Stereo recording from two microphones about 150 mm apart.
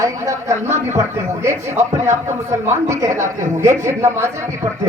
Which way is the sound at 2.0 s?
20° right (ahead or behind).